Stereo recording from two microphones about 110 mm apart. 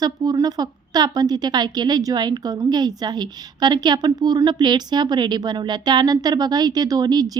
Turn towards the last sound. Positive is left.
turn(degrees=-35)  # may be behind; listen again after turning